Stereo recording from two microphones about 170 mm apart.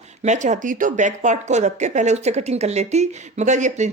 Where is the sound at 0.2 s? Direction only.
45° right (ahead or behind).